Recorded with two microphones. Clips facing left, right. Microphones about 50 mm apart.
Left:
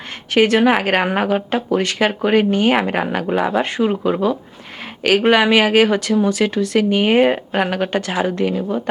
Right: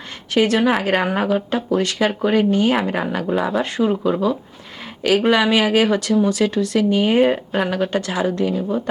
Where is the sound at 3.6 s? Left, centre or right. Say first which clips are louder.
Left 1 dB; left.